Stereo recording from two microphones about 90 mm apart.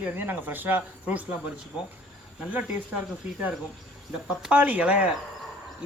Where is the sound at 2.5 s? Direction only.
15° right (ahead or behind).